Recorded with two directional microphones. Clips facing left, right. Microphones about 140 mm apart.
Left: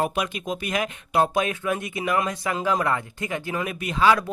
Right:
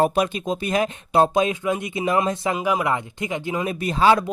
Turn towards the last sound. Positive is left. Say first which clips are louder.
# right 3 dB
turn(degrees=-30)  # may be behind; listen again after turning